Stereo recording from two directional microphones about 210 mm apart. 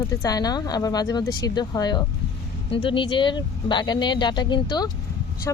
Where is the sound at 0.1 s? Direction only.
15° left (ahead or behind).